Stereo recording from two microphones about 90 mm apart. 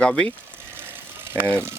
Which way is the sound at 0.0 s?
15° left (ahead or behind).